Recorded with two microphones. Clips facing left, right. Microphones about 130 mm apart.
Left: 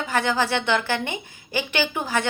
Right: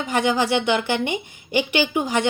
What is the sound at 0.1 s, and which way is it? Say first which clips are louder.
A woman's voice: right 3 dB; 15° right (ahead or behind).